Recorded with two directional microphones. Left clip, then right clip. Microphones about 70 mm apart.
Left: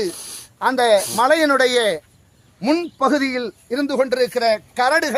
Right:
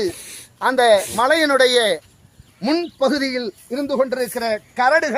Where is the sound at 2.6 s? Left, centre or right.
Centre.